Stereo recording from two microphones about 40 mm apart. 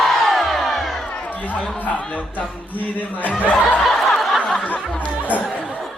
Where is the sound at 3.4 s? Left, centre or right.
Left.